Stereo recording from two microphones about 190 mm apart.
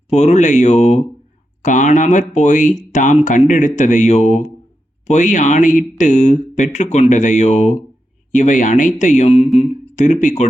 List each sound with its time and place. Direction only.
0.1 s speech: 35° left (ahead or behind)